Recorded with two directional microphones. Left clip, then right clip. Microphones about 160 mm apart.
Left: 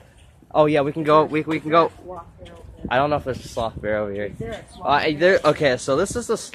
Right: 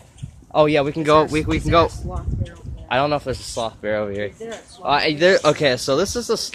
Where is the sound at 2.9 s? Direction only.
10° right (ahead or behind).